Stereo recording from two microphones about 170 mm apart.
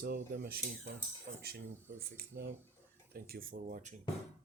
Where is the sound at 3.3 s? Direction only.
55° right (ahead or behind).